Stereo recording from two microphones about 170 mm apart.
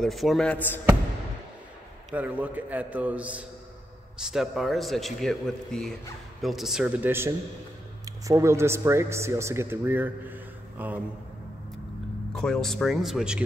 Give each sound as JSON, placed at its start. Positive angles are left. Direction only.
{"t": 0.0, "sound": "a man's voice", "side_deg": 0}
{"t": 2.0, "sound": "a man's voice", "side_deg": -10}
{"t": 12.4, "sound": "a man's voice", "side_deg": 5}